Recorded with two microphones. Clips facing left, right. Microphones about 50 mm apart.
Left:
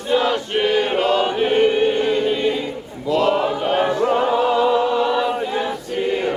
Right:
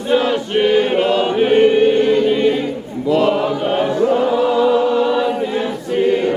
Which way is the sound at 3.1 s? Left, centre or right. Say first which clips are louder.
Right 3 dB; centre.